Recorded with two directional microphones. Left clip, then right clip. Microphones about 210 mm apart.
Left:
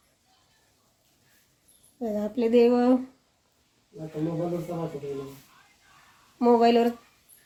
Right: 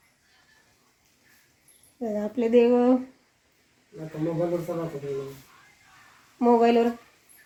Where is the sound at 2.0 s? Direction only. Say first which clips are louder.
Even; 10° left (ahead or behind).